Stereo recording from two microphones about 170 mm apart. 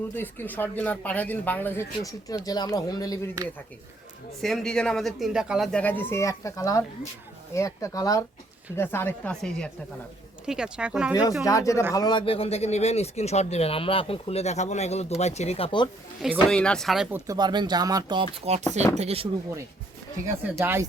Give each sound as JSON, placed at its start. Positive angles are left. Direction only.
{"t": 0.2, "sound": "speech", "side_deg": 10}
{"t": 3.4, "sound": "speech", "side_deg": -20}
{"t": 4.4, "sound": "speech", "side_deg": 0}
{"t": 11.1, "sound": "a man's voice", "side_deg": 20}
{"t": 16.2, "sound": "speech", "side_deg": 0}
{"t": 17.2, "sound": "speech", "side_deg": -25}
{"t": 20.4, "sound": "speech", "side_deg": -15}